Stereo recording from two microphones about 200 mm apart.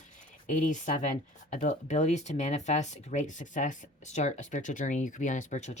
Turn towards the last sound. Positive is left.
turn(degrees=35)  # may be behind; listen again after turning